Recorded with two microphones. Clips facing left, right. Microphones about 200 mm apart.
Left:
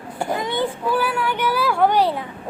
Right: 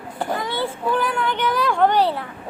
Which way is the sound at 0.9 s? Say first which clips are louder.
Right 2 dB; 5° left (ahead or behind).